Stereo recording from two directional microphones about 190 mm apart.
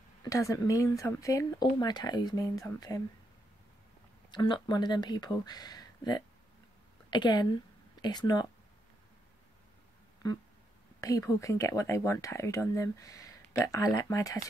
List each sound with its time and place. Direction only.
0.2 s speech: 15° left (ahead or behind)
4.3 s speech: 25° left (ahead or behind)
10.2 s speech: 20° left (ahead or behind)